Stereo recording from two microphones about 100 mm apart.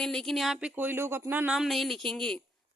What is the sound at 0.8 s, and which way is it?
Speech, 20° right (ahead or behind).